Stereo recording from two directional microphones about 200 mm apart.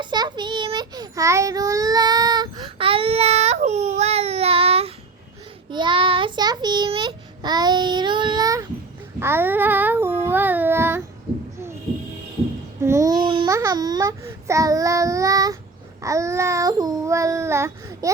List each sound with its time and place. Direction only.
0.0 s child singing: 20° right (ahead or behind)
12.8 s speech: 15° right (ahead or behind)
16.0 s child singing: 15° right (ahead or behind)